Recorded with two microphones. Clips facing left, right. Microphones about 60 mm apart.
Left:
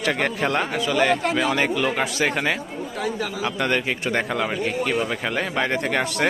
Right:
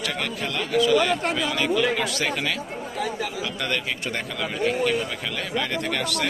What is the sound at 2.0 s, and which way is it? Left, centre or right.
A man's voice, left.